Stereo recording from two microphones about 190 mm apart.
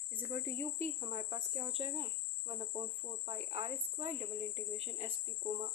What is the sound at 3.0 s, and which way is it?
Speech, 30° right (ahead or behind).